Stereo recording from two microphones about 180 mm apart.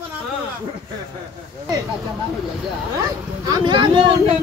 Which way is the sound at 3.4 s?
25° right (ahead or behind).